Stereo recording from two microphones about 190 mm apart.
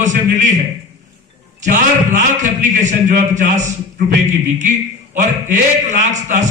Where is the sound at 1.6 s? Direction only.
40° right (ahead or behind).